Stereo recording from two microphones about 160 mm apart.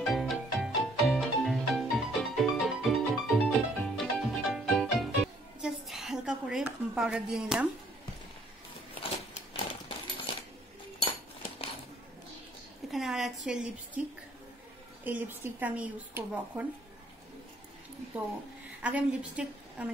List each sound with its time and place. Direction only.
0.0 s music: centre (ahead or behind)
9.5 s a sound: 30° left (ahead or behind)
11.0 s cutlery: 35° left (ahead or behind)
12.9 s a sound: centre (ahead or behind)
13.5 s a woman's voice: 5° right (ahead or behind)
15.0 s speech: 10° right (ahead or behind)
18.8 s a woman's voice: 10° right (ahead or behind)